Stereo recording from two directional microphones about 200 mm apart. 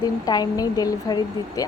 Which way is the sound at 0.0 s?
20° left (ahead or behind).